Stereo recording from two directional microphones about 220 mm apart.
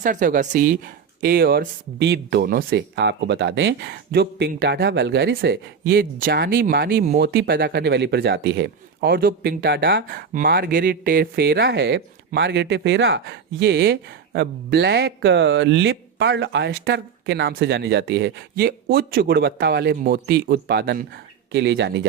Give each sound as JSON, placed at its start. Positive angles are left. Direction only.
{"t": 0.0, "sound": "speech", "side_deg": -35}